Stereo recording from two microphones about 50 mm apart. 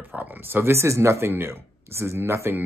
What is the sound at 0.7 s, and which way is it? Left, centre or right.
Speech, right.